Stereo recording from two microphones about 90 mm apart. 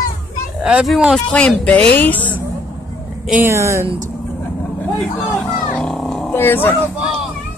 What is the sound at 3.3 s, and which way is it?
Speech, 25° right (ahead or behind).